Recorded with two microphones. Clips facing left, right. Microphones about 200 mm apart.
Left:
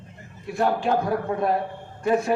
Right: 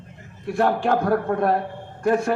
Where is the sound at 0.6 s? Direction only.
60° right (ahead or behind).